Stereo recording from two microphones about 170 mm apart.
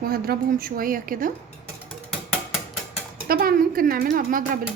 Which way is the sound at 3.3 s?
60° right (ahead or behind).